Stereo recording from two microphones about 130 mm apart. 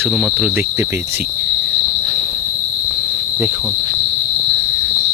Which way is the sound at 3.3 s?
20° right (ahead or behind).